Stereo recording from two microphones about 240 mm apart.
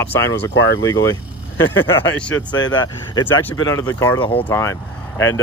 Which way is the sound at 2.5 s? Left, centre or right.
Centre.